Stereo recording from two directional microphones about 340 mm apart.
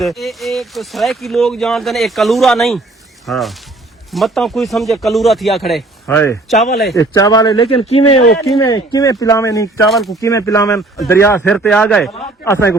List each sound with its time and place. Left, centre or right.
0.0 s speech: centre
6.7 s speech: left
6.9 s speech: centre